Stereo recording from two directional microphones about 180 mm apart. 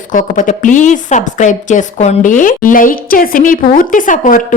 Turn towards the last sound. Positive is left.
turn(degrees=45)  # may be behind; listen again after turning